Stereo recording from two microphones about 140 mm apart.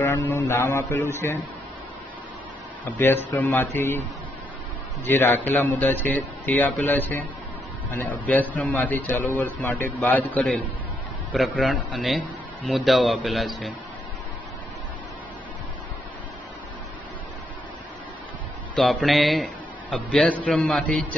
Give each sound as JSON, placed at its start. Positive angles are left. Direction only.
{"t": 0.0, "sound": "a man's voice", "side_deg": 15}
{"t": 2.8, "sound": "a man's voice", "side_deg": 15}
{"t": 5.0, "sound": "a man's voice", "side_deg": 15}
{"t": 18.9, "sound": "a man's voice", "side_deg": 0}